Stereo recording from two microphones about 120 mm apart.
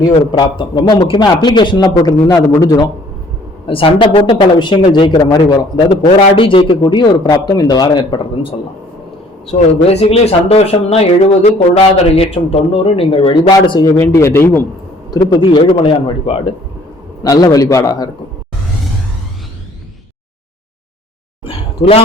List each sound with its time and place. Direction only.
0.3 s a man's voice: 40° left (ahead or behind)
3.7 s a man's voice: 50° left (ahead or behind)
9.5 s speech: 55° left (ahead or behind)
13.8 s a man's voice: 25° left (ahead or behind)
15.1 s speech: 40° left (ahead or behind)
17.2 s a man's voice: 30° left (ahead or behind)
21.4 s a sound: 50° left (ahead or behind)